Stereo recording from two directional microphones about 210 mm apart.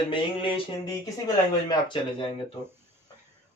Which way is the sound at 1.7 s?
25° left (ahead or behind).